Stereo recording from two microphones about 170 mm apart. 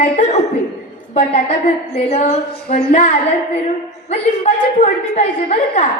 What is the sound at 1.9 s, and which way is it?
A man's voice, 40° left (ahead or behind).